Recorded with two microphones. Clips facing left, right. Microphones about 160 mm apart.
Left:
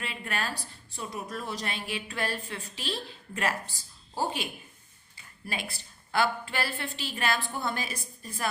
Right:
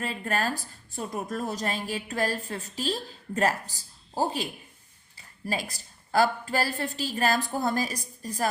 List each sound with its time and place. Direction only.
0.0 s a woman's voice: 40° right (ahead or behind)